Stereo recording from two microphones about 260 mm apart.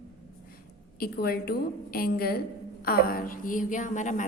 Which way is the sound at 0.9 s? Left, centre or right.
Left.